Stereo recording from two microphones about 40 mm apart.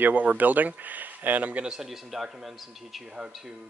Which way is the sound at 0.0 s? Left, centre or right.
Right.